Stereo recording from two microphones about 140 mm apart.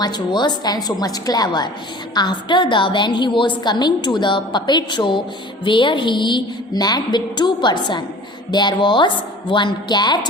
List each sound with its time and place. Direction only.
0.0 s a woman's voice: 30° left (ahead or behind)